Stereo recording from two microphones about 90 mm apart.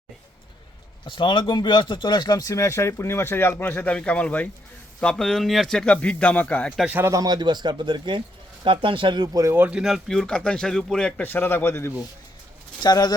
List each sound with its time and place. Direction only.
1.0 s a man's voice: 65° left (ahead or behind); by 6.7 s 15° left (ahead or behind)
6.8 s speech: 25° right (ahead or behind)
7.1 s speech: 45° right (ahead or behind)
9.6 s speech: 15° right (ahead or behind)
9.8 s a man's voice: centre (ahead or behind)
11.2 s speech: 20° left (ahead or behind)
12.8 s speech: 50° left (ahead or behind)